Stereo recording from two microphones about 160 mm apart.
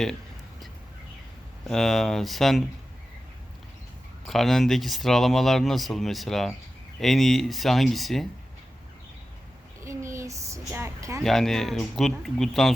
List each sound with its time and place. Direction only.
1.6 s speech: centre (ahead or behind)
4.3 s speech: centre (ahead or behind)
9.8 s a sound: 20° right (ahead or behind)
10.7 s a woman's voice: 15° right (ahead or behind)
11.2 s speech: centre (ahead or behind)